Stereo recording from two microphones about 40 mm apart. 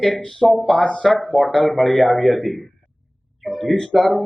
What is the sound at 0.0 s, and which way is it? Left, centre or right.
Speech, centre.